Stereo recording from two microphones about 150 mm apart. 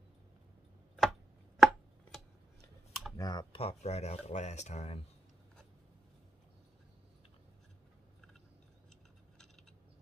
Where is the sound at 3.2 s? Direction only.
30° left (ahead or behind); by 5.0 s 45° left (ahead or behind).